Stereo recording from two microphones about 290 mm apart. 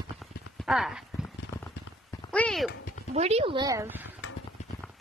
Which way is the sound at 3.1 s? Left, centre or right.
Right.